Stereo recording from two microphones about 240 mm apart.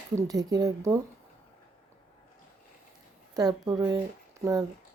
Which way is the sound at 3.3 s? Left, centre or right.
Centre.